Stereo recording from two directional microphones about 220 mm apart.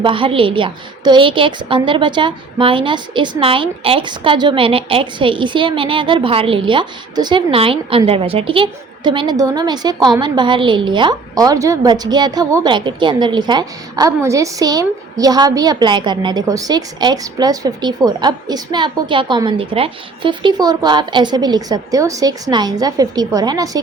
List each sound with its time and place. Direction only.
0.0 s a woman's voice: 25° right (ahead or behind)